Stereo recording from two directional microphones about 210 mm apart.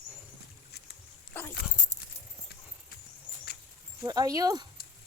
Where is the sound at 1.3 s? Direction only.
10° left (ahead or behind).